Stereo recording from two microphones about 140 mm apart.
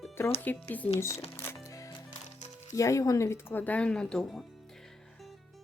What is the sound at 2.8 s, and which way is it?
A woman's voice, 20° left (ahead or behind).